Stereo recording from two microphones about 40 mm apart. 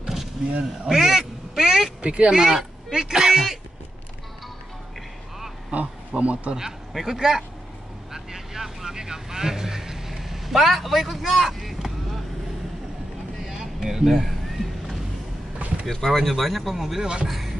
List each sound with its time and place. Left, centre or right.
0.0 s a sound: centre
0.8 s quack: centre
2.0 s speech: right
2.3 s speech: centre
5.7 s speech: right
6.9 s speech: centre
8.1 s vehicle: centre
13.4 s a sound: centre
15.9 s speech: centre
17.3 s music: centre